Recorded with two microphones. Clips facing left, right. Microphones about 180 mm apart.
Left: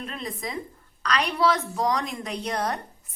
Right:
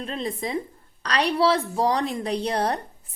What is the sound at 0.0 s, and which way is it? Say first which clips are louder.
A woman's voice: right 5 dB; 30° right (ahead or behind).